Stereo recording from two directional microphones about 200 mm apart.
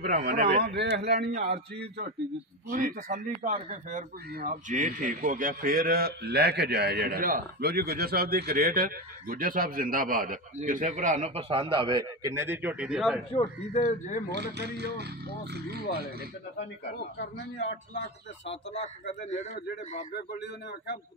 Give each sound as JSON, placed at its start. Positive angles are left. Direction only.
{"t": 0.0, "sound": "a man's voice", "side_deg": -50}
{"t": 2.7, "sound": "a man's voice", "side_deg": -45}
{"t": 13.7, "sound": "a man's voice", "side_deg": 40}
{"t": 14.3, "sound": "a man's voice", "side_deg": -55}
{"t": 18.7, "sound": "a man's voice", "side_deg": 35}
{"t": 20.2, "sound": "a man's voice", "side_deg": 60}